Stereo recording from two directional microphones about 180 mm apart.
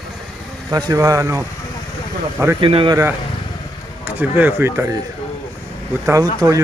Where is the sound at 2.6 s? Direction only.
30° right (ahead or behind).